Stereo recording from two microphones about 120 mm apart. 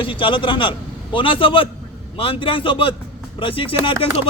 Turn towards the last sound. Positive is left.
turn(degrees=50)  # may be behind; listen again after turning